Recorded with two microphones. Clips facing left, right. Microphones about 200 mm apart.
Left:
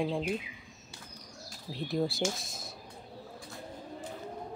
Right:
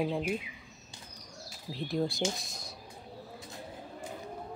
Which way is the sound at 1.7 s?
Centre (ahead or behind).